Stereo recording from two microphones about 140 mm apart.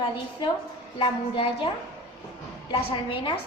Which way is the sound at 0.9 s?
35° left (ahead or behind).